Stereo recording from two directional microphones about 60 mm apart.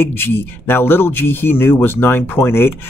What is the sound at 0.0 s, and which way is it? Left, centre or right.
Speech, left.